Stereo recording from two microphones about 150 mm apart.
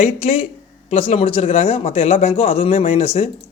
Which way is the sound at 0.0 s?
45° left (ahead or behind).